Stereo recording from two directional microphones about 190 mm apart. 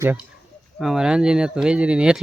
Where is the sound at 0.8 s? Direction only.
Centre (ahead or behind).